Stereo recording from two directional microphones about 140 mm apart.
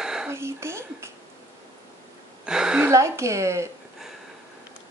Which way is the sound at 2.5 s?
5° right (ahead or behind).